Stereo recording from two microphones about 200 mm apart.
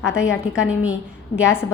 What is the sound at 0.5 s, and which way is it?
Speech, 5° right (ahead or behind).